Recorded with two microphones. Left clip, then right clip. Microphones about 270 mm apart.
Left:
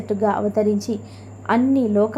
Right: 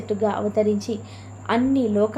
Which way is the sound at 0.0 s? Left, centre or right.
Centre.